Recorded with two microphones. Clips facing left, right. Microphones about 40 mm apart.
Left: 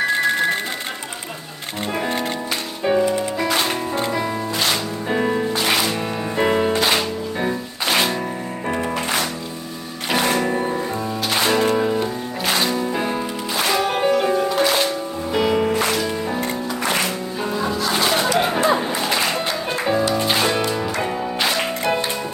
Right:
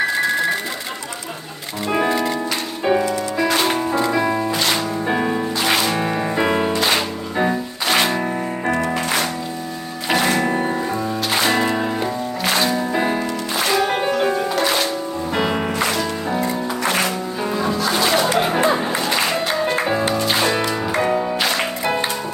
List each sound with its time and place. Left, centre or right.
2.0 s music: left
4.1 s music: centre
4.5 s music: centre
6.7 s music: centre
10.2 s music: centre
13.6 s music: centre
17.4 s music: centre
21.0 s music: centre